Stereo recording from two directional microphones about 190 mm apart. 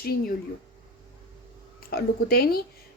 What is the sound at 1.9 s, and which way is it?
Speech, 55° left (ahead or behind).